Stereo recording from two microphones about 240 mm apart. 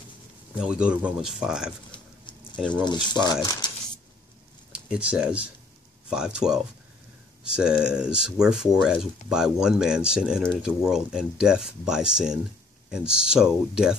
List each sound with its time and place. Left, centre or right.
0.6 s speech: centre
1.9 s a sound: centre
2.7 s speech: centre
4.7 s speech: centre